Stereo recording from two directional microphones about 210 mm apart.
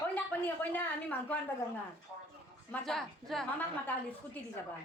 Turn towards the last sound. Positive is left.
turn(degrees=0)  # may be behind; listen again after turning